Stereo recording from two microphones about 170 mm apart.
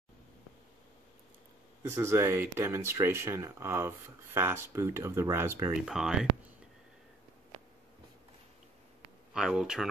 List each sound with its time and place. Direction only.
1.8 s speech: 15° right (ahead or behind)
5.9 s speech: 5° right (ahead or behind)
9.3 s speech: 5° right (ahead or behind)